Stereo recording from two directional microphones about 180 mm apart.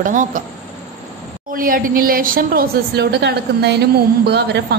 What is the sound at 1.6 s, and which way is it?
A woman's voice, 50° right (ahead or behind).